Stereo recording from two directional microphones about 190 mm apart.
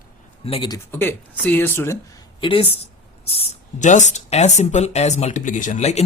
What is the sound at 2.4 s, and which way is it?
Speech, 30° left (ahead or behind).